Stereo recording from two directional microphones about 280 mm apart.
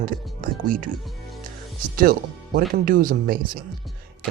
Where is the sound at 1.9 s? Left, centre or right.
Right.